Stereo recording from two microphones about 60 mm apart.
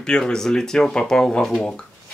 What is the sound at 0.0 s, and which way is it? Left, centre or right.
Speech, centre.